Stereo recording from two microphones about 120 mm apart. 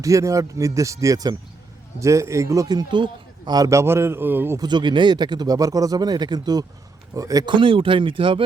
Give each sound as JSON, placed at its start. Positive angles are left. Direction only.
{"t": 0.0, "sound": "a man's voice", "side_deg": -25}
{"t": 4.5, "sound": "a man's voice", "side_deg": -35}
{"t": 7.5, "sound": "speech", "side_deg": -45}